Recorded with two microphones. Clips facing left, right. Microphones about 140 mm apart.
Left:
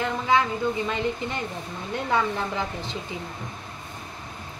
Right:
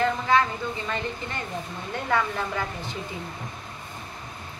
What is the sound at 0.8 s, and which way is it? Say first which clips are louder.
A woman's voice: left 4 dB; 20° left (ahead or behind).